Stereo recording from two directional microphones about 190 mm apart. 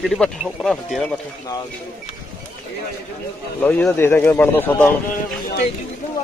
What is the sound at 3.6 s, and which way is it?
Speech, 10° left (ahead or behind).